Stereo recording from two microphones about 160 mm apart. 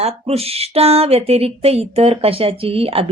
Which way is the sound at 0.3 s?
40° right (ahead or behind).